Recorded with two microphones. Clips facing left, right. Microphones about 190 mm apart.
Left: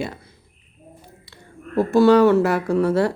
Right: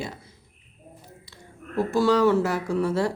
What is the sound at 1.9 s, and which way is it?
Speech, 60° left (ahead or behind).